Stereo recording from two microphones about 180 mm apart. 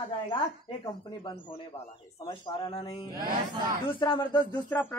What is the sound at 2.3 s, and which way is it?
Speech, 25° left (ahead or behind).